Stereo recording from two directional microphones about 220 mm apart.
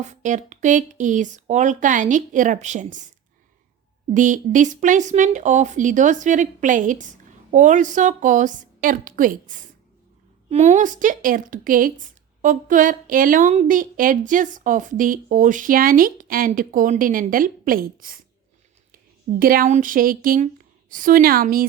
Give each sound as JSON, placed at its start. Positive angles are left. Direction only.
{"t": 0.0, "sound": "speech", "side_deg": -35}
{"t": 4.1, "sound": "speech", "side_deg": -35}
{"t": 19.4, "sound": "speech", "side_deg": -40}